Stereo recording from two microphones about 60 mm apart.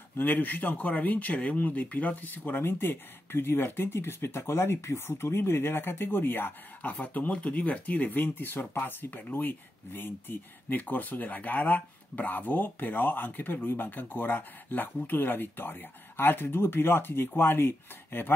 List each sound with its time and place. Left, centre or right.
0.2 s speech: left